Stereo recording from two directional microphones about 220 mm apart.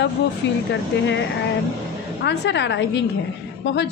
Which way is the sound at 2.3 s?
55° left (ahead or behind).